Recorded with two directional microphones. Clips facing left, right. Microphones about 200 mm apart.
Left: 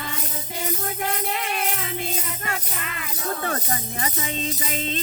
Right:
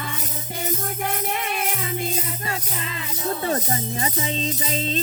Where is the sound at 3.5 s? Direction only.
25° right (ahead or behind).